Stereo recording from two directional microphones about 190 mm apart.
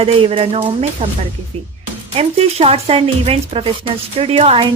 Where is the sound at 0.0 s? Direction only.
30° right (ahead or behind).